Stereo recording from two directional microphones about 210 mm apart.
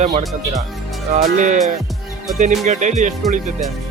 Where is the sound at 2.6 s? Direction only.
35° right (ahead or behind).